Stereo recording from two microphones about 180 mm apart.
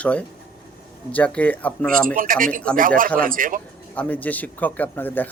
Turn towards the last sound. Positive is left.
turn(degrees=10)  # may be behind; listen again after turning